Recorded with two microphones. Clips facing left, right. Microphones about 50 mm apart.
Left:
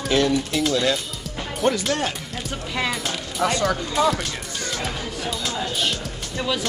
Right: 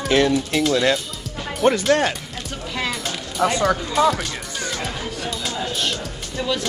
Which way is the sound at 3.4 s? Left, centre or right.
Centre.